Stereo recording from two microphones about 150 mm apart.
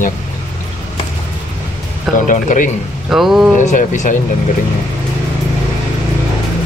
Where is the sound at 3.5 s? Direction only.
55° left (ahead or behind).